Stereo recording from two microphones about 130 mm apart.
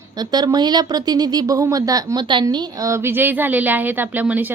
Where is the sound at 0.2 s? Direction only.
30° right (ahead or behind).